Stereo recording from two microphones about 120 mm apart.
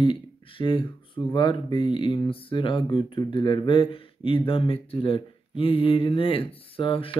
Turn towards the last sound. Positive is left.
turn(degrees=50)  # may be behind; listen again after turning